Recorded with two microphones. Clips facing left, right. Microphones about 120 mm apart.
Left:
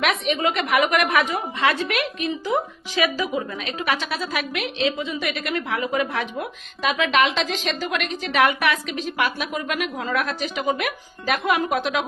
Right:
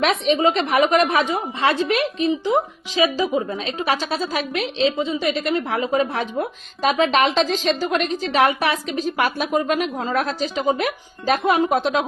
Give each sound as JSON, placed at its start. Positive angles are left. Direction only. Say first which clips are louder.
{"t": 0.0, "sound": "a woman's voice", "louder": "right 4 dB", "side_deg": -30}